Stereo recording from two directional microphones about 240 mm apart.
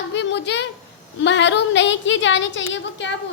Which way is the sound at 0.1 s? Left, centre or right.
Left.